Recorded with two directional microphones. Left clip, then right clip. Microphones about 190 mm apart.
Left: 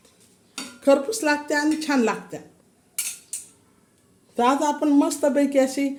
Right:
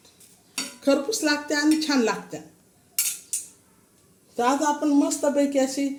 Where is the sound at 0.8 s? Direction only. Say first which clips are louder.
Left 3 dB; 10° left (ahead or behind).